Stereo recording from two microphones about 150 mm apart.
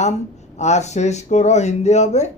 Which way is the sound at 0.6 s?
50° left (ahead or behind).